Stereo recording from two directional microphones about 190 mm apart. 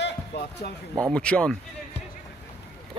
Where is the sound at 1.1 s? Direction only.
5° left (ahead or behind).